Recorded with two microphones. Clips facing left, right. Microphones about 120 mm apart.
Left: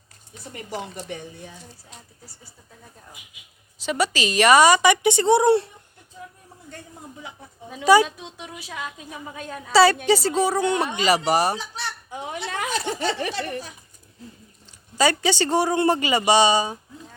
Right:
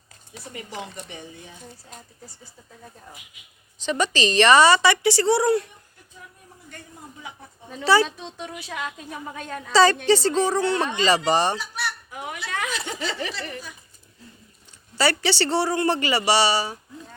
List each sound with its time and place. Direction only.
0.5 s speech: 45° left (ahead or behind)
0.9 s speech: 60° left (ahead or behind)
3.8 s a woman's voice: 10° left (ahead or behind); by 5.7 s 30° left (ahead or behind)
7.7 s a woman's voice: 10° left (ahead or behind); by 13.6 s 45° left (ahead or behind)
14.9 s a woman's voice: 15° left (ahead or behind)